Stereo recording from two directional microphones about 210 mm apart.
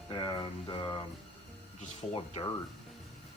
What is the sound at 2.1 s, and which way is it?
Speech, 25° left (ahead or behind).